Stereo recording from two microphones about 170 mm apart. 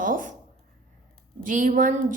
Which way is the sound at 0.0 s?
50° right (ahead or behind).